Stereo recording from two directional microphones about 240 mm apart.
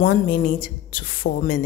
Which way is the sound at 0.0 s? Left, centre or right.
Left.